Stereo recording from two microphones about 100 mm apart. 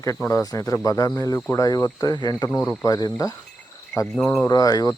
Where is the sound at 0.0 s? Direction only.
30° left (ahead or behind).